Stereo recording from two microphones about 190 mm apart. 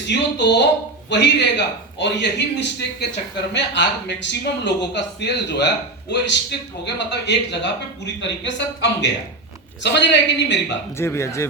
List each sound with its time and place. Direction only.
0.1 s a man's voice: 65° left (ahead or behind)
10.9 s speech: 15° left (ahead or behind)